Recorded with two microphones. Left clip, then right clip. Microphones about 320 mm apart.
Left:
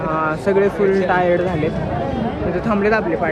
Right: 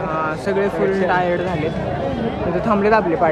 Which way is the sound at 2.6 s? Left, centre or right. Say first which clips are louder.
Right 2 dB; centre.